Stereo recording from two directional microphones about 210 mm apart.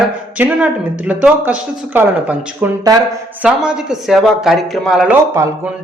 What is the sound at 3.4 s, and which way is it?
Speech, 5° right (ahead or behind).